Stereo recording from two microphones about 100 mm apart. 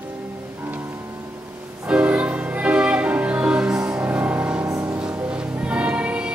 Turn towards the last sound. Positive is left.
turn(degrees=-10)  # may be behind; listen again after turning